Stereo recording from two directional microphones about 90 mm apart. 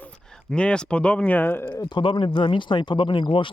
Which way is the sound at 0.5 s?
10° left (ahead or behind).